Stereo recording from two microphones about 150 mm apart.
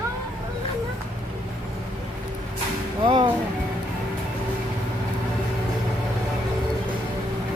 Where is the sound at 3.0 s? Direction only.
35° right (ahead or behind).